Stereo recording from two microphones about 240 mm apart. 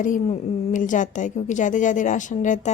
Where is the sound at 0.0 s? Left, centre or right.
Left.